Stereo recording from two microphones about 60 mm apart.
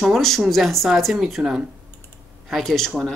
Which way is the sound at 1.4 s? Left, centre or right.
Centre.